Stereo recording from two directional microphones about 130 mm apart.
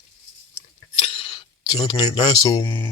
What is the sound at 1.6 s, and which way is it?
Speech, 30° left (ahead or behind).